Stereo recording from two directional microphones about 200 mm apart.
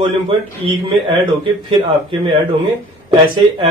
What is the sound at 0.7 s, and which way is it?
Speech, 25° right (ahead or behind).